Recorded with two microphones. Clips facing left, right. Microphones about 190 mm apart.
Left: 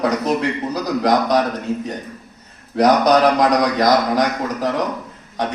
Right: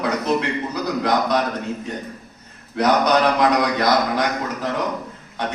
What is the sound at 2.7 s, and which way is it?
Speech, 40° left (ahead or behind).